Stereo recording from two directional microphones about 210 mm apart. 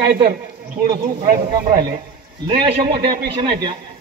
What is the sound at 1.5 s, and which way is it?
Speech, 20° right (ahead or behind).